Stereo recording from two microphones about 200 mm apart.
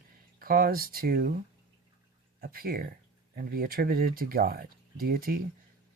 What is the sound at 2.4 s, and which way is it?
Speech, 45° right (ahead or behind).